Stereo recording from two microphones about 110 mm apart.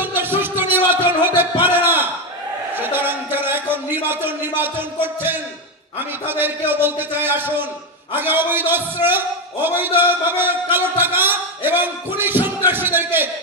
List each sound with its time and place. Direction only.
0.0 s music: 20° right (ahead or behind)
2.7 s a sound: 20° right (ahead or behind)
5.9 s a man's voice: 20° right (ahead or behind)